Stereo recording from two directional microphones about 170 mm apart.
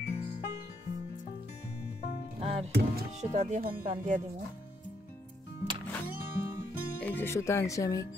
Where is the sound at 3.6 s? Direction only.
60° right (ahead or behind).